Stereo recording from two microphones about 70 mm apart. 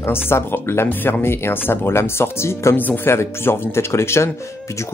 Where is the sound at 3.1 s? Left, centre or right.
Left.